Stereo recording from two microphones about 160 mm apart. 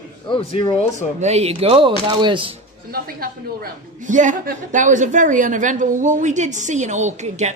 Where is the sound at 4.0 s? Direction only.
50° right (ahead or behind).